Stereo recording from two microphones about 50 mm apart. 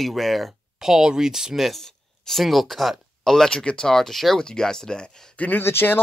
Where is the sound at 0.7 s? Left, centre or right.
Centre.